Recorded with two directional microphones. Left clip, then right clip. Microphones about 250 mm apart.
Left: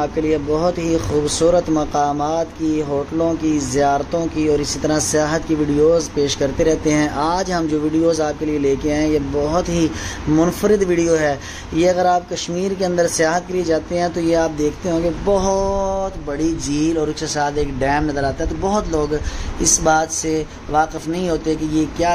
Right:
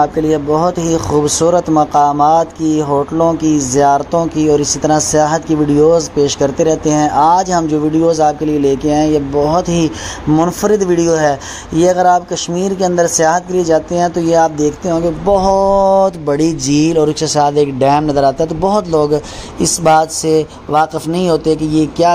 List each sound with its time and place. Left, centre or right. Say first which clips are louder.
0.0 s speech: right 6 dB; centre